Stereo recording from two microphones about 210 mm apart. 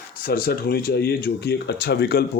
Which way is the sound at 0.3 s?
45° left (ahead or behind).